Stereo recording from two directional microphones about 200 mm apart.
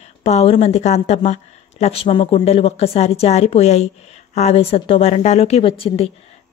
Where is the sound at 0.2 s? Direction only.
30° left (ahead or behind).